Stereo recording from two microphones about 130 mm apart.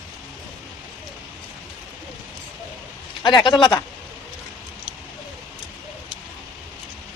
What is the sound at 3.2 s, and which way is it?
Speech, 35° left (ahead or behind).